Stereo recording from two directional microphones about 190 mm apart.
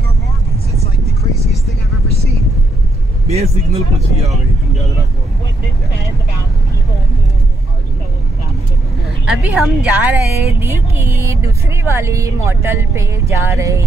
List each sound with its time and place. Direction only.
3.3 s speech: 35° right (ahead or behind)
9.2 s a woman's voice: 5° right (ahead or behind)